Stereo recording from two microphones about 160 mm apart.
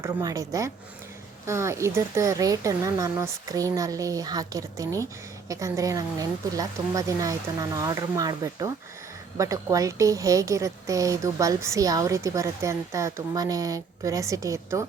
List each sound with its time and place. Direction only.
0.0 s a woman's voice: 20° right (ahead or behind)